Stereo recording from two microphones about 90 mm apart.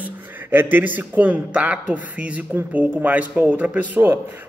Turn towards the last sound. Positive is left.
turn(degrees=-20)  # may be behind; listen again after turning